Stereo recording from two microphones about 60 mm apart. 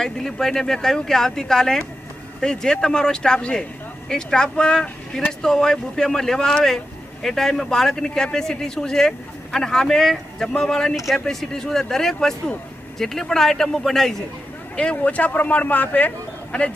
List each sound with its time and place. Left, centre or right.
0.0 s a man's voice: centre
14.8 s a man's voice: centre